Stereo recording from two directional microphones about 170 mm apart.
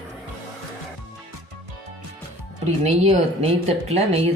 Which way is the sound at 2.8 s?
40° right (ahead or behind).